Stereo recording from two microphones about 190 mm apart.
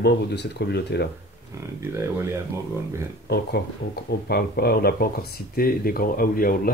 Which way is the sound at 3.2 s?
60° left (ahead or behind).